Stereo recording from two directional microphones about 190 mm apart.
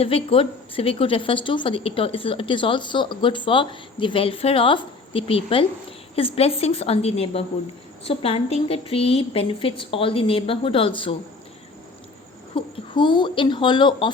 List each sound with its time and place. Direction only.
0.0 s a woman's voice: 30° left (ahead or behind)
12.5 s a woman's voice: 25° left (ahead or behind)